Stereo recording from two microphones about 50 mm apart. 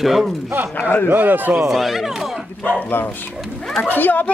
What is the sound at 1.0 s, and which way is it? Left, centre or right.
Speech, right.